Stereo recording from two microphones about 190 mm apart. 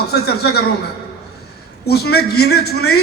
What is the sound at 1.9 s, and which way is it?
A man's voice, 55° left (ahead or behind).